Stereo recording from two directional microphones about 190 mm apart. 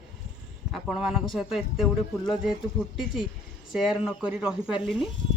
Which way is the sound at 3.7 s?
Centre (ahead or behind).